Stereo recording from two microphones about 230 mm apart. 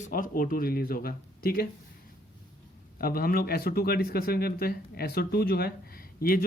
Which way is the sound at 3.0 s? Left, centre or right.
Left.